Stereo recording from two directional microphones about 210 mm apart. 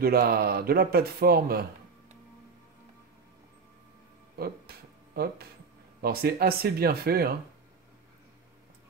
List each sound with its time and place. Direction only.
0.0 s speech: 45° right (ahead or behind)
4.4 s a sound: 45° right (ahead or behind)
5.9 s speech: 45° right (ahead or behind)